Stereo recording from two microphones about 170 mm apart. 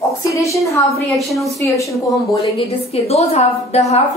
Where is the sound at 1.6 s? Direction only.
20° left (ahead or behind).